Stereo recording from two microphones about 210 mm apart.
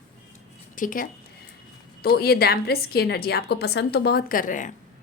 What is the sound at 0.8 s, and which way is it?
A woman's voice, 40° left (ahead or behind).